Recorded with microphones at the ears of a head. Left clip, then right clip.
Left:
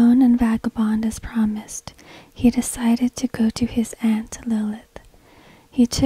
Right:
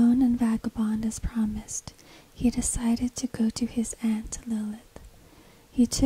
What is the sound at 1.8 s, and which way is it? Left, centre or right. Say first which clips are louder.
Speech: left 8 dB; left.